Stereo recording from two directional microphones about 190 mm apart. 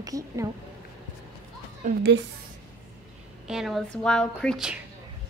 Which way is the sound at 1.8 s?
40° right (ahead or behind).